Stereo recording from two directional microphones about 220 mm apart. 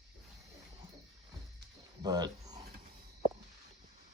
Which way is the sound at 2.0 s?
20° right (ahead or behind).